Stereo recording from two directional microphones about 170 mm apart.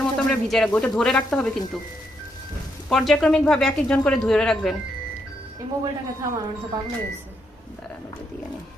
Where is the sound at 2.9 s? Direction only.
Centre (ahead or behind).